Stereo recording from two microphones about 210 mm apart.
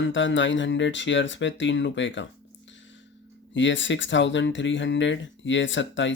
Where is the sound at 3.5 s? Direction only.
60° left (ahead or behind).